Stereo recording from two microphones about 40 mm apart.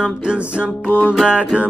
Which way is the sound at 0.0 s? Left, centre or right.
Right.